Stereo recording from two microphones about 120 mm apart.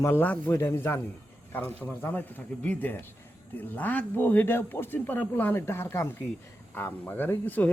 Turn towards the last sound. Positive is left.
turn(degrees=15)  # may be behind; listen again after turning